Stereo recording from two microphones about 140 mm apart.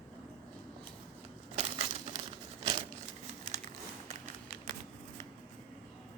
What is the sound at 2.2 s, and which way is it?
Crumpling, 40° right (ahead or behind).